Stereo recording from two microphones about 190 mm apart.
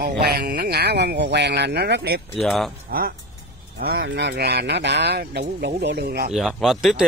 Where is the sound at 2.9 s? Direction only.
50° right (ahead or behind).